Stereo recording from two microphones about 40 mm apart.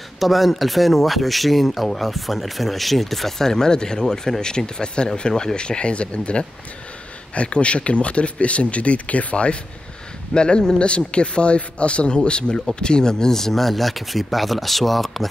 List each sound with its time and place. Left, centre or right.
0.2 s a man's voice: centre